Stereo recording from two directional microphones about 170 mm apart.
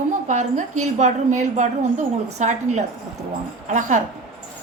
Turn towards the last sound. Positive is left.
turn(degrees=-45)  # may be behind; listen again after turning